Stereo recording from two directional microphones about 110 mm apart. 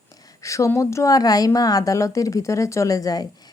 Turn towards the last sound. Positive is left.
turn(degrees=35)  # may be behind; listen again after turning